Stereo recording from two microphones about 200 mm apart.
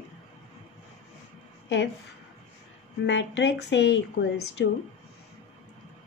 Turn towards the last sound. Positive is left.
turn(degrees=60)  # may be behind; listen again after turning